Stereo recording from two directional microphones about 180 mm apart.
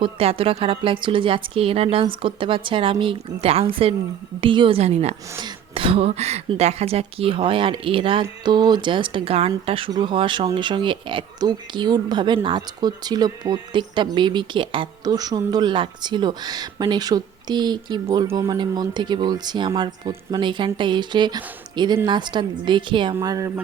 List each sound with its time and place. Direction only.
0.0 s a woman's voice: 30° right (ahead or behind)